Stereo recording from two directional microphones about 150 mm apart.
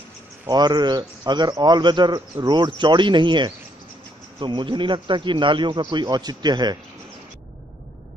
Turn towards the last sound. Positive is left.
turn(degrees=-30)  # may be behind; listen again after turning